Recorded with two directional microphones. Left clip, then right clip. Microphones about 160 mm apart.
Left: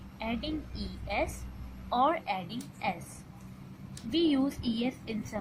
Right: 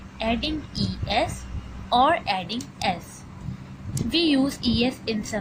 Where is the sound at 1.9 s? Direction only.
15° right (ahead or behind).